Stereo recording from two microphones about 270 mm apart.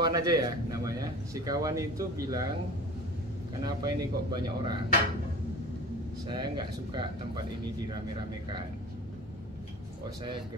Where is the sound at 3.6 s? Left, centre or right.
Centre.